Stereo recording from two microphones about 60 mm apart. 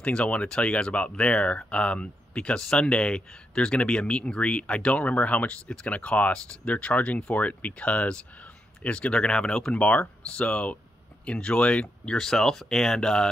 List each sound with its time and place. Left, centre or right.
0.0 s speech: centre
9.8 s speech: left